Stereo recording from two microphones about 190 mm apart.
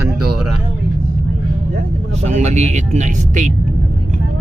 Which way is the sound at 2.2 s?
35° right (ahead or behind).